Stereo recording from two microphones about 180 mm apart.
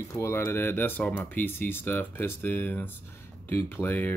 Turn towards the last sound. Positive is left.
turn(degrees=10)  # may be behind; listen again after turning